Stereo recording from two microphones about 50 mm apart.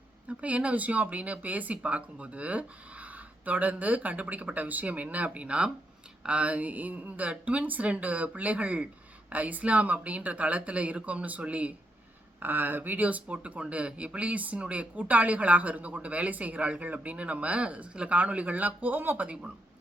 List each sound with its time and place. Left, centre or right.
0.3 s speech: right
12.4 s speech: right